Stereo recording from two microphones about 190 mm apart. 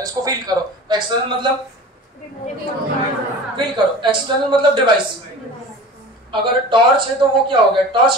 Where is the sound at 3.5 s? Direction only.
25° right (ahead or behind).